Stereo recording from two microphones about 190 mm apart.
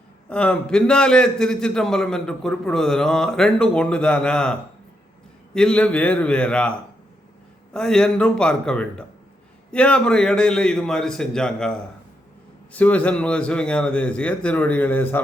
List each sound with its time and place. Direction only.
0.3 s a man's voice: 5° left (ahead or behind)
5.5 s a man's voice: 5° left (ahead or behind)
12.7 s a man's voice: 5° left (ahead or behind)